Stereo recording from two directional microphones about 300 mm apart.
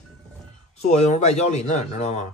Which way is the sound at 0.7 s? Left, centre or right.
Left.